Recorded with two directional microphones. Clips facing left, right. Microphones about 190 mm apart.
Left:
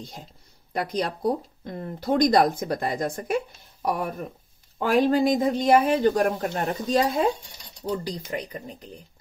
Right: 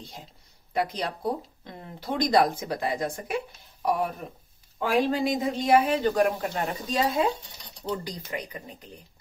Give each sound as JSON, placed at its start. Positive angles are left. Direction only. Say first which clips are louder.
{"t": 0.7, "sound": "speech", "louder": "left 2 dB", "side_deg": 45}